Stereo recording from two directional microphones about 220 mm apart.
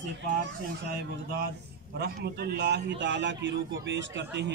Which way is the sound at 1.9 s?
45° right (ahead or behind).